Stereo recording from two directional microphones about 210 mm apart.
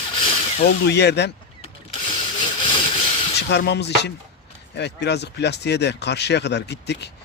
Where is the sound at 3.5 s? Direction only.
55° left (ahead or behind).